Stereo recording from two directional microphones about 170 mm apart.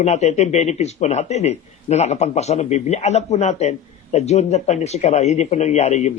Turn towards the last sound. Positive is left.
turn(degrees=40)  # may be behind; listen again after turning